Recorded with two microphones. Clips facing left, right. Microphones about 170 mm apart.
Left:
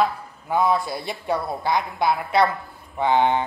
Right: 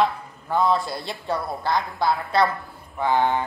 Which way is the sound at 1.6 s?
20° left (ahead or behind).